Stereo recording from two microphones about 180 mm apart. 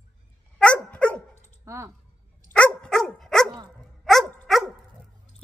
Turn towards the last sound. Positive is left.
turn(degrees=0)  # may be behind; listen again after turning